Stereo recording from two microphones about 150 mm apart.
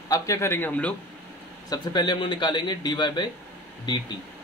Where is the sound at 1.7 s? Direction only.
30° left (ahead or behind).